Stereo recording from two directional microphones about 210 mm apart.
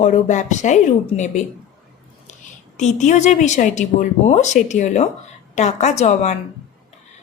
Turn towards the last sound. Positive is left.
turn(degrees=35)  # may be behind; listen again after turning